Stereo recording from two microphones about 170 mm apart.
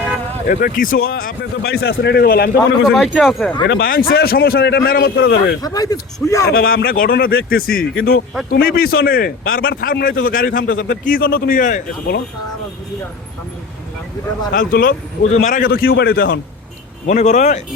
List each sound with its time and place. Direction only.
0.4 s speech: 55° left (ahead or behind)
2.8 s speech: centre (ahead or behind)
3.7 s speech: 60° left (ahead or behind); by 5.5 s 85° left
5.6 s speech: 20° left (ahead or behind)
6.5 s speech: 60° left (ahead or behind)
14.5 s speech: 55° left (ahead or behind)
15.3 s speech: 45° left (ahead or behind); by 16.4 s 65° left (ahead or behind)
17.1 s speech: 45° left (ahead or behind)